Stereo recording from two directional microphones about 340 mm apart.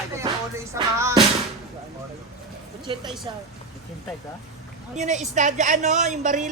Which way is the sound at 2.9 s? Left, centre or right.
Centre.